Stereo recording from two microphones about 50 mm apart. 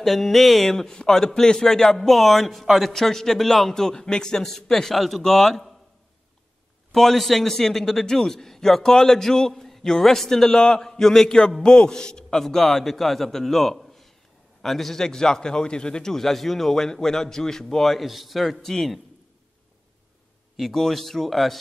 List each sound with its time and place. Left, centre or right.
0.0 s speech: centre
6.9 s speech: centre
18.0 s speech: centre
20.5 s speech: centre